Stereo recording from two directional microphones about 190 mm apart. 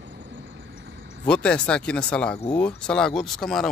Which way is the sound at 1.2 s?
5° left (ahead or behind).